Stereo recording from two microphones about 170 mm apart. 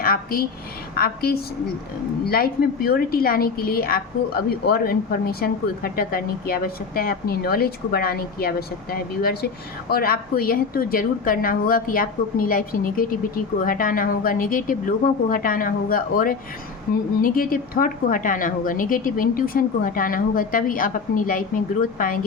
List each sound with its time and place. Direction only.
0.0 s a woman's voice: 60° left (ahead or behind)